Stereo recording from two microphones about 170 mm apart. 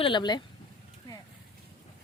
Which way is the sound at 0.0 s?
25° left (ahead or behind).